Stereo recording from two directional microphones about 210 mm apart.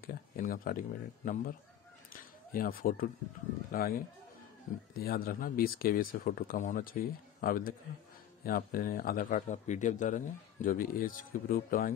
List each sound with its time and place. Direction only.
0.0 s speech: 40° left (ahead or behind)
2.5 s speech: 40° left (ahead or behind)